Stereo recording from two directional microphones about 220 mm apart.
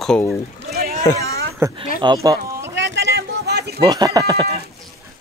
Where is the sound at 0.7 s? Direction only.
45° right (ahead or behind).